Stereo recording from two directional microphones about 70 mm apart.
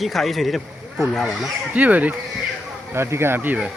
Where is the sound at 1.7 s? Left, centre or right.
Right.